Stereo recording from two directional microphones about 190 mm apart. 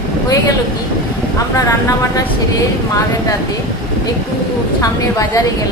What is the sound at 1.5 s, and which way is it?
Speech, 15° left (ahead or behind).